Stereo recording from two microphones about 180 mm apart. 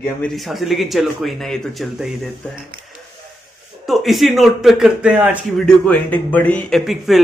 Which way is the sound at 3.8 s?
Centre (ahead or behind).